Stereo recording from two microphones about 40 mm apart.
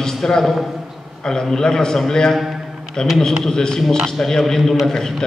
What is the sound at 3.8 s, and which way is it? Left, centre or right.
Speech, centre.